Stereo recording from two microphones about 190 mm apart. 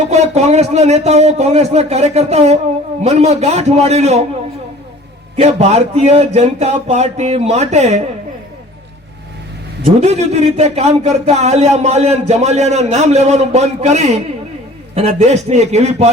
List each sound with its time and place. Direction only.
0.0 s speech: 35° right (ahead or behind)
5.4 s speech: 35° right (ahead or behind)
10.0 s speech: 35° right (ahead or behind)